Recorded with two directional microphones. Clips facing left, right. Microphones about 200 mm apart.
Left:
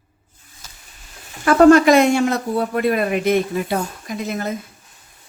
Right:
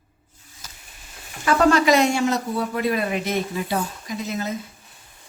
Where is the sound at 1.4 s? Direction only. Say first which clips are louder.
Left 7 dB; 50° left (ahead or behind).